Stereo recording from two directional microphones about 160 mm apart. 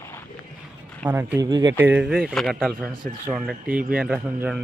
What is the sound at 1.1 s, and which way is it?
Speech, 10° right (ahead or behind).